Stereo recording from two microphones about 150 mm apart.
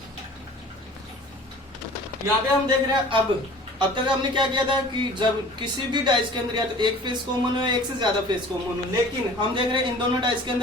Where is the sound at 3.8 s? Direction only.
35° right (ahead or behind).